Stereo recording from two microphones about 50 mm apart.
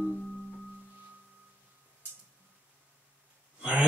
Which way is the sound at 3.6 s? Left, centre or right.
Right.